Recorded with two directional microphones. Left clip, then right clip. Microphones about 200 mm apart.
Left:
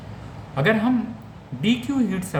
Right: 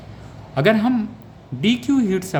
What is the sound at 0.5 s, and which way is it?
Speech, 60° right (ahead or behind).